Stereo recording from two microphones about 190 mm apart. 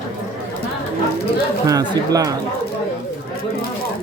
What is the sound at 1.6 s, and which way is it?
Speech, 20° right (ahead or behind).